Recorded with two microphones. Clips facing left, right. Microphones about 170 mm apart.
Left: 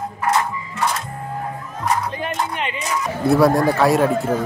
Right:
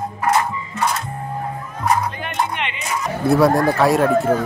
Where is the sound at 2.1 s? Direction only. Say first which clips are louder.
Even; 35° left (ahead or behind).